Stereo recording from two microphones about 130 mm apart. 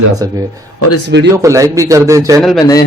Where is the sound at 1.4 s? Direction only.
25° right (ahead or behind).